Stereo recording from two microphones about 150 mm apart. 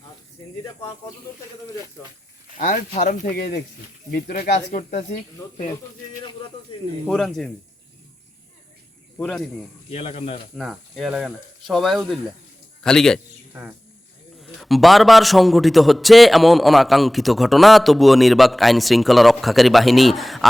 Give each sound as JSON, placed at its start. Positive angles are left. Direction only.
{"t": 2.6, "sound": "speech", "side_deg": 65}
{"t": 4.5, "sound": "speech", "side_deg": 55}
{"t": 7.1, "sound": "a man's voice", "side_deg": 0}
{"t": 9.9, "sound": "speech", "side_deg": 45}
{"t": 10.5, "sound": "a man's voice", "side_deg": 0}
{"t": 13.5, "sound": "a man's voice", "side_deg": -10}